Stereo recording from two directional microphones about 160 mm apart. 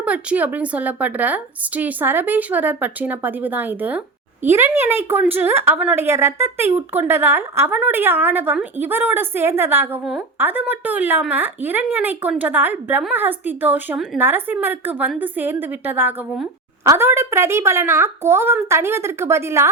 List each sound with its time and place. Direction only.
0.0 s speech: 10° right (ahead or behind)
10.0 s a woman's voice: centre (ahead or behind)